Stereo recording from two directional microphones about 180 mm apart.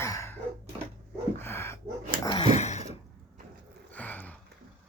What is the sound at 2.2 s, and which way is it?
Dog, 30° left (ahead or behind).